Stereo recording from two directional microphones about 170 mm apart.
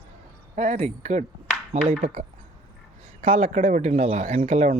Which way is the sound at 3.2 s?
35° right (ahead or behind).